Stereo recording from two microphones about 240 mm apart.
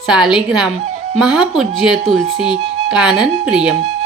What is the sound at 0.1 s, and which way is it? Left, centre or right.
A woman's voice, centre.